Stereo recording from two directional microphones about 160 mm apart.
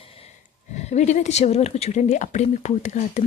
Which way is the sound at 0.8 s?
45° left (ahead or behind).